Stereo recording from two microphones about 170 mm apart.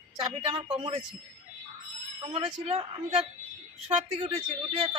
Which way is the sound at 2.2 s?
35° right (ahead or behind).